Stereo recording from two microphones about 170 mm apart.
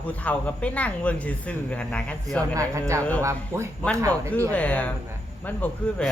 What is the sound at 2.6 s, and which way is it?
Speech, 15° right (ahead or behind).